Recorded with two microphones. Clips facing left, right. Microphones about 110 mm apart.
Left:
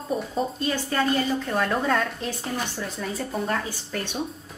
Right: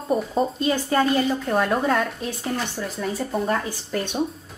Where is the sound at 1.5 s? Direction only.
15° right (ahead or behind).